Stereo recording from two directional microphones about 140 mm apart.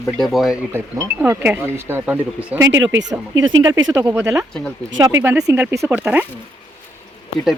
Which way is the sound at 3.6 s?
25° right (ahead or behind).